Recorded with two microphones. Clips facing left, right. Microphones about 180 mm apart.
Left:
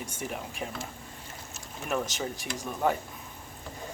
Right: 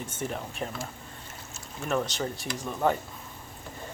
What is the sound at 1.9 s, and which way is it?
Speech, 15° left (ahead or behind).